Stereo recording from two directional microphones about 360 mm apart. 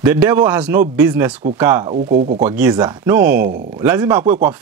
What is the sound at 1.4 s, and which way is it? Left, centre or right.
Speech, centre.